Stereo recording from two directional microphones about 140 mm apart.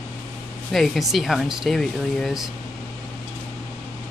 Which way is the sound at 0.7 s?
Centre (ahead or behind).